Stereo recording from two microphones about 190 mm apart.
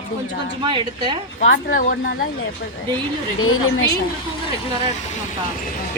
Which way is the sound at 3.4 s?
90° left.